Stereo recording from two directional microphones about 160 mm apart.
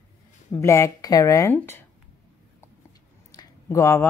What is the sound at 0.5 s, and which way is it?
Speech, 20° left (ahead or behind).